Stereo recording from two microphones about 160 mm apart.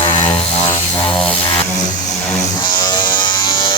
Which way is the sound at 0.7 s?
10° left (ahead or behind).